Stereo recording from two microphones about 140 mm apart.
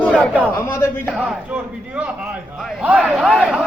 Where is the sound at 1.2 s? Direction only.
10° right (ahead or behind).